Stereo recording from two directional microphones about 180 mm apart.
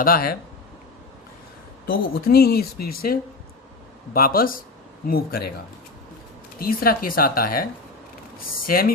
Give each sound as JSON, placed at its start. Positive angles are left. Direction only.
{"t": 0.0, "sound": "speech", "side_deg": 55}
{"t": 1.9, "sound": "speech", "side_deg": 55}
{"t": 6.6, "sound": "speech", "side_deg": 55}
{"t": 8.6, "sound": "speech", "side_deg": 55}